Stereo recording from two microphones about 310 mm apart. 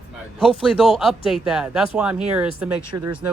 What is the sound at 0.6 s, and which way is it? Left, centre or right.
Speech, centre.